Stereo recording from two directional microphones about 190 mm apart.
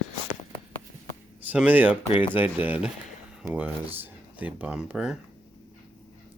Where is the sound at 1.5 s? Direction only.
10° right (ahead or behind).